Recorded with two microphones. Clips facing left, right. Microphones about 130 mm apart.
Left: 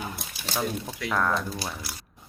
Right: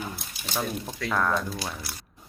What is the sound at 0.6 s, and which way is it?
Speech, 5° left (ahead or behind).